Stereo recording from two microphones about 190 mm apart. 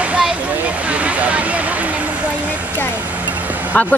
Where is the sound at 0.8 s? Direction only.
5° right (ahead or behind).